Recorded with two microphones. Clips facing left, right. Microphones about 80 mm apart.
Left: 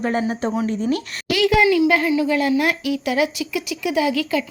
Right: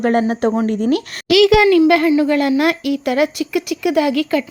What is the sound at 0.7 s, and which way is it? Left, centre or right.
Speech, right.